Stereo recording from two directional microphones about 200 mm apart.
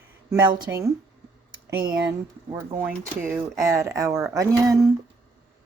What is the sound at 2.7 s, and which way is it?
Speech, 10° right (ahead or behind).